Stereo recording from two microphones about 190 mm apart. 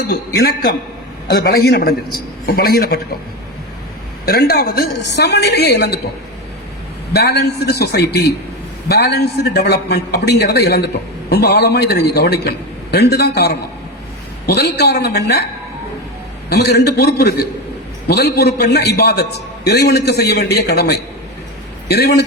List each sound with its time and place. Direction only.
0.3 s a man's voice: 55° left (ahead or behind)
4.3 s a man's voice: 55° left (ahead or behind)
7.1 s a man's voice: 55° left (ahead or behind)
16.5 s a man's voice: 60° left (ahead or behind)